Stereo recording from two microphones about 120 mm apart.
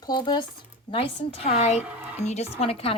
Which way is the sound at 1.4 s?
65° left (ahead or behind).